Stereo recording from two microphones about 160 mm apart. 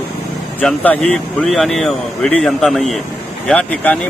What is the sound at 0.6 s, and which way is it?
Speech, 5° left (ahead or behind).